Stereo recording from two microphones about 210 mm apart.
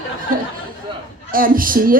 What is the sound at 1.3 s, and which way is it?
Speech, 40° right (ahead or behind).